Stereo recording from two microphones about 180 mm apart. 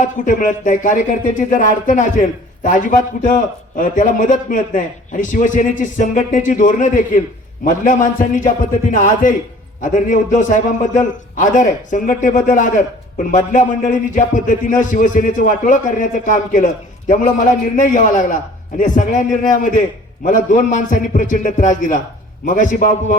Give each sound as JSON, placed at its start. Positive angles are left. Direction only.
{"t": 0.0, "sound": "a man's voice", "side_deg": 45}
{"t": 17.7, "sound": "a man's voice", "side_deg": 45}